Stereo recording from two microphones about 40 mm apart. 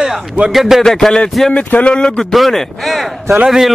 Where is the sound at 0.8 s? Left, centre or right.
Centre.